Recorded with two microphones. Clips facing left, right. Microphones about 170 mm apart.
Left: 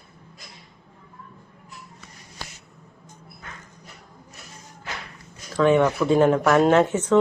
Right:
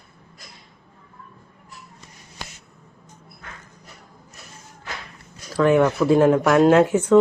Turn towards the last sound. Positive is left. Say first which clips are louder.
# right 3 dB
turn(degrees=-10)  # may be behind; listen again after turning